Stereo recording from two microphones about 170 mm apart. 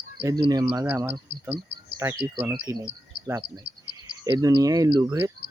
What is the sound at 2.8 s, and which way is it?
Insect, 15° right (ahead or behind).